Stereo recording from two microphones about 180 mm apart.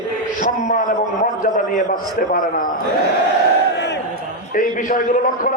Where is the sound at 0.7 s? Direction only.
45° left (ahead or behind).